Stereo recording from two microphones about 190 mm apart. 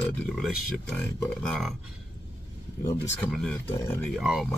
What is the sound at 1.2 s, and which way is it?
Speech, 5° left (ahead or behind).